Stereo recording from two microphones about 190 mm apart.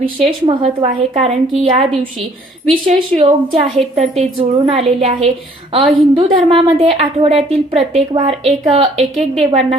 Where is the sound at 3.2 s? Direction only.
30° right (ahead or behind).